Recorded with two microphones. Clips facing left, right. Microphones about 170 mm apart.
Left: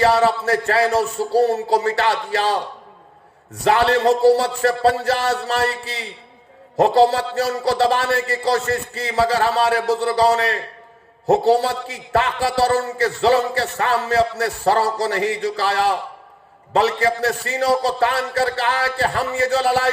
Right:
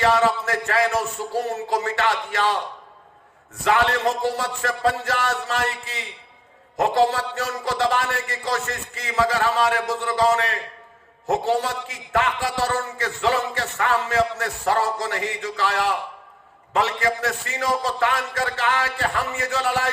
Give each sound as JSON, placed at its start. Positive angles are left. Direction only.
{"t": 0.0, "sound": "a man's voice", "side_deg": 35}